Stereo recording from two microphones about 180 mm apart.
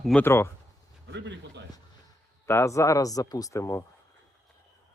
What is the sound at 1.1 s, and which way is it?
Speech, 75° right (ahead or behind).